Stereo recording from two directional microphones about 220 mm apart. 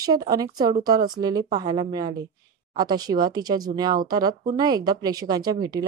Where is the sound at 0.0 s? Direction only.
15° right (ahead or behind).